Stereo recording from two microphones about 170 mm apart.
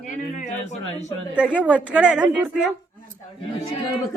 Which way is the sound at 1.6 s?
10° right (ahead or behind).